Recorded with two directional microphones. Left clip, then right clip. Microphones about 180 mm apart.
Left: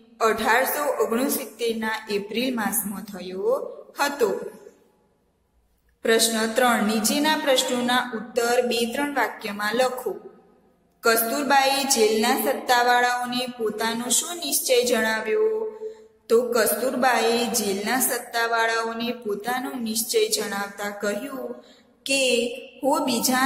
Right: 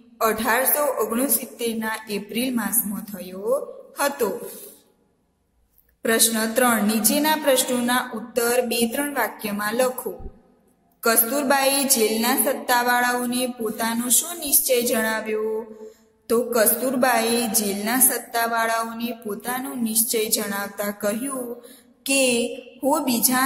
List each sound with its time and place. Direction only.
0.2 s a woman's voice: 20° right (ahead or behind)
6.0 s a woman's voice: 20° right (ahead or behind)
11.0 s a woman's voice: 20° right (ahead or behind)